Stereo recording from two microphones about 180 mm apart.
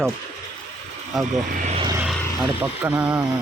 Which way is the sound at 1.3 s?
40° right (ahead or behind).